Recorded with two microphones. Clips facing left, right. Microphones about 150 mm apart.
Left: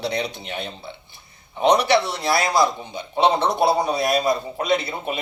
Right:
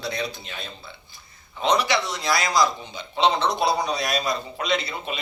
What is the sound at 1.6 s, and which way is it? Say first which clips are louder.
Speech: left 5 dB; 60° left (ahead or behind).